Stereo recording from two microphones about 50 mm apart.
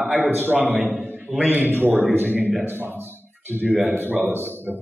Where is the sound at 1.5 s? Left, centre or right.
Right.